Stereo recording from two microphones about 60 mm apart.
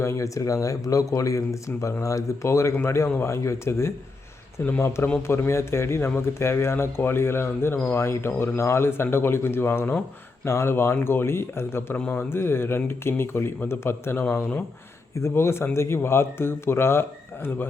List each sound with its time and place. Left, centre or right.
0.0 s speech: left
10.4 s speech: left
15.2 s speech: left